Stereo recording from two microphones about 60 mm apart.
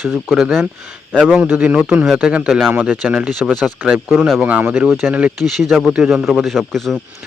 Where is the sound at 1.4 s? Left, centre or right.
Centre.